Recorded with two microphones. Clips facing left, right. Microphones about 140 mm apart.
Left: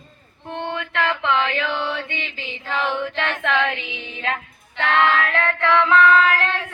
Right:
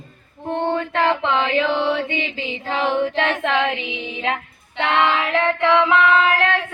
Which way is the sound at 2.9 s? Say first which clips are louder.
Right 5 dB; 30° right (ahead or behind).